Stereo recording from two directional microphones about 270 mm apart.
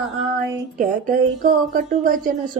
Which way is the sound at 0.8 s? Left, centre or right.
Right.